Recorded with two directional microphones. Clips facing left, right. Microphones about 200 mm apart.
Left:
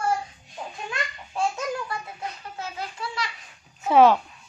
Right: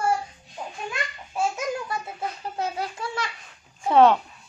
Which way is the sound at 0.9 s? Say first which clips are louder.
Even; 5° right (ahead or behind).